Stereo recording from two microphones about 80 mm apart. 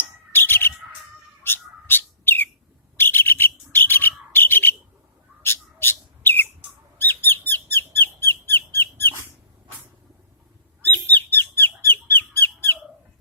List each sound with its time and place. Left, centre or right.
0.3 s bird: left
7.0 s squeak: left
10.8 s squawk: left